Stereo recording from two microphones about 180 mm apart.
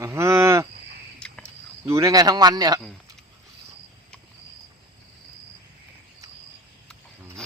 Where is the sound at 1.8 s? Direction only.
15° right (ahead or behind).